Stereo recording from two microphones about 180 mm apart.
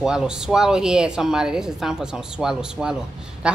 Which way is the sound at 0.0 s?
5° right (ahead or behind).